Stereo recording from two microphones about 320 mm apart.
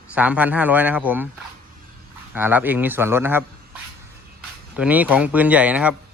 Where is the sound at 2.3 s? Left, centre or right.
Centre.